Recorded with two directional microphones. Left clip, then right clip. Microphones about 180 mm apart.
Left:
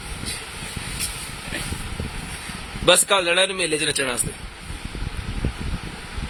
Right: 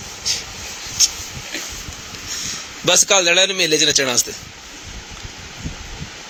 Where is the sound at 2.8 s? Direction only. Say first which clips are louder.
Right 2 dB; 20° right (ahead or behind).